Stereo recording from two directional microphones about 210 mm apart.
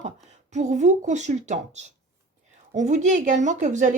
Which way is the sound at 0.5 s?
35° right (ahead or behind).